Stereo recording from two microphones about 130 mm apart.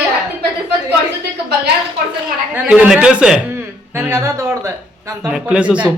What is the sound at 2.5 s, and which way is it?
Speech, 10° right (ahead or behind).